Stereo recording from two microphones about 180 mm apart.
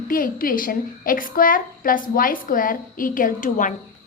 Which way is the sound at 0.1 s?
50° left (ahead or behind).